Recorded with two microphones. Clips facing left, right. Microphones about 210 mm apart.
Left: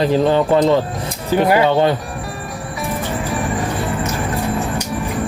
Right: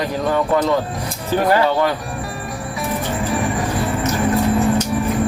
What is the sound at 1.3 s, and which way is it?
Speech, 15° left (ahead or behind).